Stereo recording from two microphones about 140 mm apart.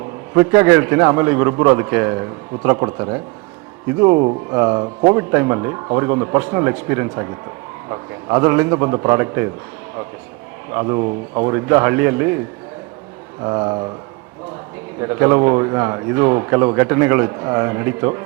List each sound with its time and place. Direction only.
0.3 s speech: 15° right (ahead or behind)
10.7 s speech: 20° right (ahead or behind)
13.4 s speech: 25° right (ahead or behind)
14.9 s speech: 20° right (ahead or behind)